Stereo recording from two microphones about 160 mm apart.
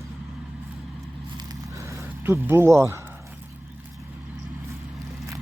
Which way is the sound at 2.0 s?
15° right (ahead or behind).